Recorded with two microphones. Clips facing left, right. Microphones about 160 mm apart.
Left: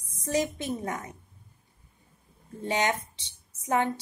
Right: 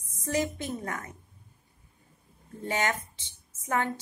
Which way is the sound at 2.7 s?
20° left (ahead or behind).